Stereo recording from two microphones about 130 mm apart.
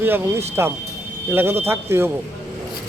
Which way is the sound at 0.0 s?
15° right (ahead or behind).